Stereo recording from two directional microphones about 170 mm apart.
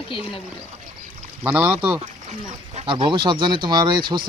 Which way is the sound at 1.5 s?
5° right (ahead or behind).